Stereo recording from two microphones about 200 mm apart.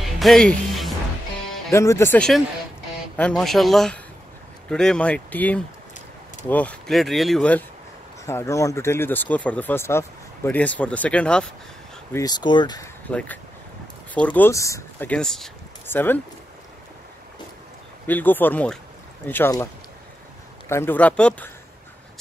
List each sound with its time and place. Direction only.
0.2 s music: centre (ahead or behind)
1.7 s speech: 15° left (ahead or behind)
12.1 s speech: 20° left (ahead or behind)
14.1 s speech: 5° left (ahead or behind)
18.0 s speech: 10° left (ahead or behind)